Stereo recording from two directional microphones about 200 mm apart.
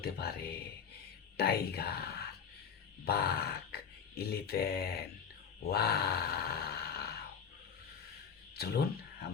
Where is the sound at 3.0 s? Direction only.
50° left (ahead or behind).